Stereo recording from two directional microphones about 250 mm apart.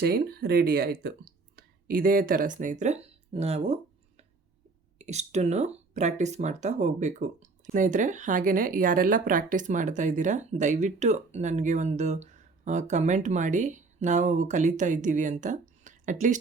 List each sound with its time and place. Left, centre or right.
0.0 s speech: right
4.9 s speech: right